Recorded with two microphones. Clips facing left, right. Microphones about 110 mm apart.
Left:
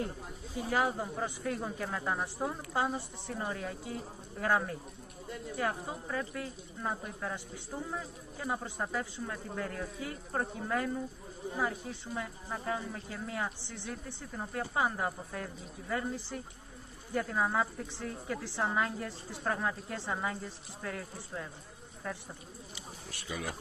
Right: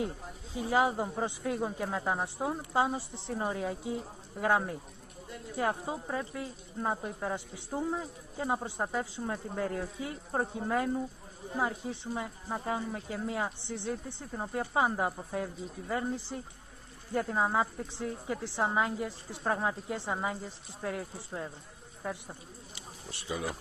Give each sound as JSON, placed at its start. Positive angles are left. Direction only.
{"t": 0.6, "sound": "speech", "side_deg": -20}
{"t": 23.1, "sound": "speech", "side_deg": -25}